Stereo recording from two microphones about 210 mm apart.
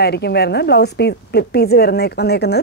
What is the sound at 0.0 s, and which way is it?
A woman's voice, 50° left (ahead or behind).